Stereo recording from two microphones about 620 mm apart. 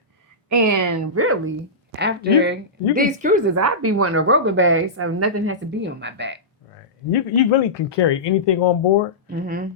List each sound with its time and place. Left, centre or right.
0.4 s a woman's voice: right; by 3.4 s centre
3.5 s a woman's voice: right
7.1 s speech: left
9.3 s speech: centre